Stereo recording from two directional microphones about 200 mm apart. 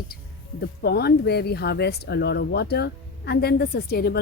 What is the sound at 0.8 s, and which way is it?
Speech, 55° left (ahead or behind).